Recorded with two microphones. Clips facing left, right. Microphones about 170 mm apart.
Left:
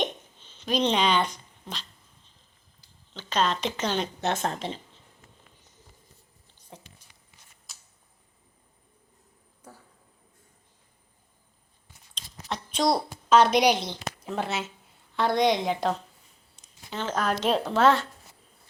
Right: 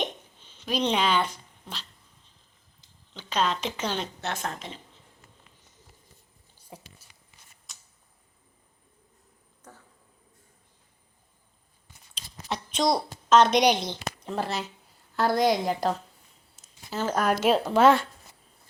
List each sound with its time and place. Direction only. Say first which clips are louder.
0.6 s speech: left 1 dB; 10° right (ahead or behind)
2.8 s speech: left 2 dB; 10° right (ahead or behind)
4.2 s speech: left 5 dB; 25° left (ahead or behind)
6.7 s a sound: right 1 dB; 10° right (ahead or behind)
12.7 s a woman's voice: left 1 dB; 5° left (ahead or behind)
16.6 s a sound: right 3 dB; 5° right (ahead or behind)
17.4 s speech: right 2 dB; 5° right (ahead or behind)